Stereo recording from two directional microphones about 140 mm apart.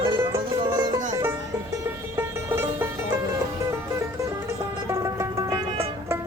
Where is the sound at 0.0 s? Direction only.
35° right (ahead or behind).